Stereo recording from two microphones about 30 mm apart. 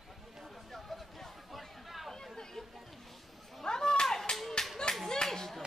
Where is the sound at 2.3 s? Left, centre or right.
Centre.